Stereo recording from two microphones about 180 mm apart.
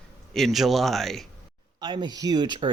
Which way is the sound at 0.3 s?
Centre (ahead or behind).